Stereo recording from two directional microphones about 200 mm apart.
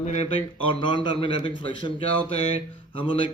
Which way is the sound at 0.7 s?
25° left (ahead or behind).